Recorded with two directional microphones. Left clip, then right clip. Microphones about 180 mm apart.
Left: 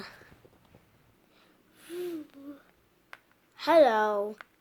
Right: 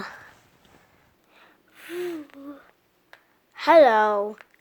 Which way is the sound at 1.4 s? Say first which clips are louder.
Right 11 dB; 15° right (ahead or behind).